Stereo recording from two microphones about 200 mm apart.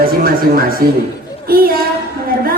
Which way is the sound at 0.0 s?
45° right (ahead or behind).